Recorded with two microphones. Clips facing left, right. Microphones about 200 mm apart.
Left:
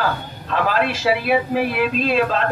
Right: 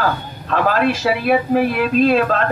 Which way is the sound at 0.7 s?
50° right (ahead or behind).